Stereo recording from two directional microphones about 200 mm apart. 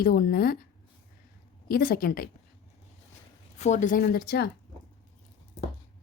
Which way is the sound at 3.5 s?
35° left (ahead or behind).